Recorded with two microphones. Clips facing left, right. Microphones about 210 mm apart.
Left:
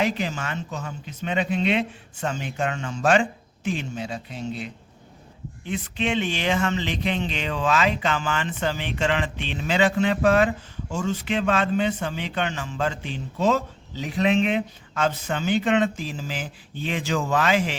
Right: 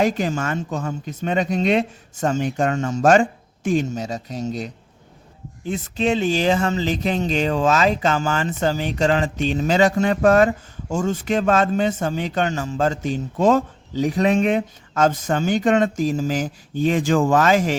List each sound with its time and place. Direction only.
0.0 s speech: 45° right (ahead or behind)